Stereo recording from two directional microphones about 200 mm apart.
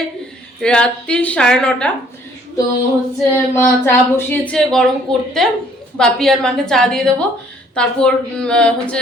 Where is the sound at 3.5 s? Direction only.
10° left (ahead or behind).